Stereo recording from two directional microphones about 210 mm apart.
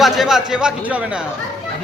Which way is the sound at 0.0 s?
Centre (ahead or behind).